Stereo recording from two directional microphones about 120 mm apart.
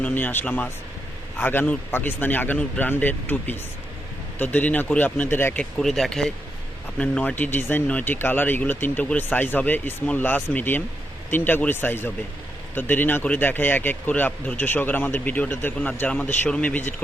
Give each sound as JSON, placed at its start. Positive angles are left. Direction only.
{"t": 0.0, "sound": "speech", "side_deg": 15}
{"t": 5.5, "sound": "speech", "side_deg": 5}